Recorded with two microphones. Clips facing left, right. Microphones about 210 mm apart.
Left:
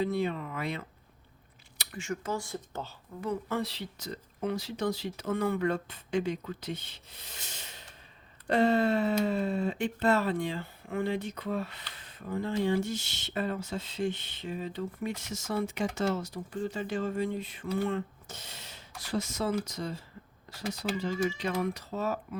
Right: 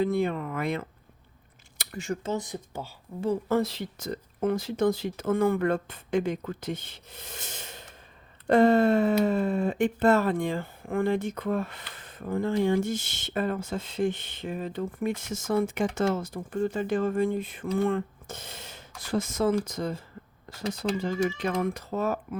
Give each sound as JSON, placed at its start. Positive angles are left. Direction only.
{"t": 0.0, "sound": "speech", "side_deg": -50}
{"t": 1.8, "sound": "a sound", "side_deg": -40}
{"t": 2.2, "sound": "speech", "side_deg": -20}
{"t": 3.5, "sound": "speech", "side_deg": -45}